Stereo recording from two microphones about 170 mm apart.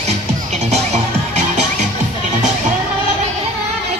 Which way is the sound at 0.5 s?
40° right (ahead or behind).